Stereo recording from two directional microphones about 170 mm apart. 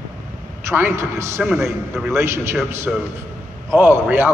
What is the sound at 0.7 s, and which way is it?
A man's voice, 15° right (ahead or behind).